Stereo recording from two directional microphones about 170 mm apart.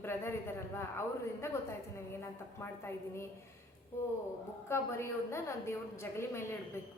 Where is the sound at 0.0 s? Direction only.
15° left (ahead or behind).